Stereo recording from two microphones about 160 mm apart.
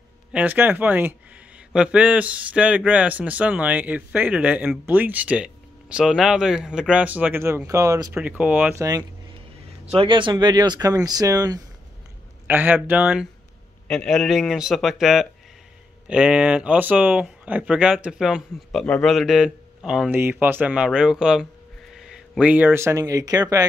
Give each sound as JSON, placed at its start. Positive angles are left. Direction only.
{"t": 0.3, "sound": "speech", "side_deg": -10}
{"t": 8.1, "sound": "speech", "side_deg": -10}
{"t": 9.9, "sound": "speech", "side_deg": -30}
{"t": 12.4, "sound": "speech", "side_deg": -10}
{"t": 13.8, "sound": "speech", "side_deg": 5}